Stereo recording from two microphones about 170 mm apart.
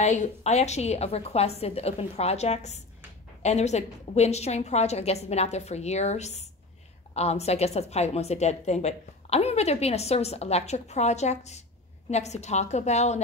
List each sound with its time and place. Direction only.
0.0 s a woman's voice: 45° left (ahead or behind)